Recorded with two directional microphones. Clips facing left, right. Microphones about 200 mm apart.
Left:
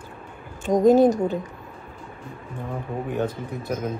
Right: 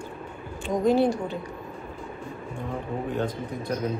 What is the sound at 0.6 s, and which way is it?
Speech, 45° left (ahead or behind).